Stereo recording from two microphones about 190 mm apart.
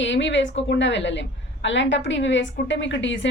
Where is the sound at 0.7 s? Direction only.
70° left (ahead or behind).